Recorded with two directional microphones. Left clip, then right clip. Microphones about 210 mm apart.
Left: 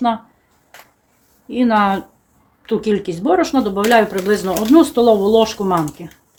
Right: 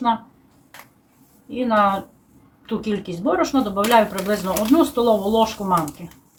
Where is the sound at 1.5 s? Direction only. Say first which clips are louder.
Left 3 dB; 45° left (ahead or behind).